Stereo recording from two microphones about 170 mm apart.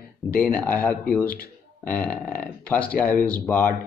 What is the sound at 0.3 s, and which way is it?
Speech, 10° left (ahead or behind).